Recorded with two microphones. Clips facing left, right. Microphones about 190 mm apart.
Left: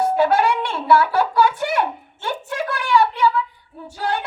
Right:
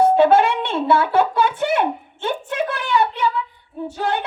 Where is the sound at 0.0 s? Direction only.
25° right (ahead or behind).